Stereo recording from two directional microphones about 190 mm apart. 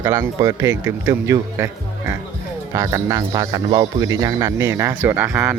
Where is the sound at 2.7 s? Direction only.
15° right (ahead or behind).